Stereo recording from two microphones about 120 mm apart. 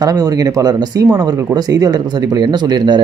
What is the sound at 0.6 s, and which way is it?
Speech, 30° right (ahead or behind).